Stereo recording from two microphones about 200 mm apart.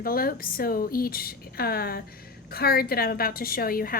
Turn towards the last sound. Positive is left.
turn(degrees=45)  # may be behind; listen again after turning